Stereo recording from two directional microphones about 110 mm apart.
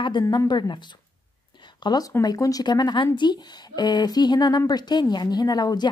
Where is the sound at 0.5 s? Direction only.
45° left (ahead or behind).